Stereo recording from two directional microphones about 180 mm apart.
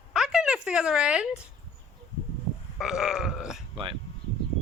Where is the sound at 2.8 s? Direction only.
Centre (ahead or behind).